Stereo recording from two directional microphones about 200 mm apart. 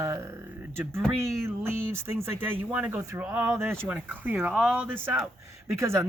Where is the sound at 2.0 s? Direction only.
10° right (ahead or behind).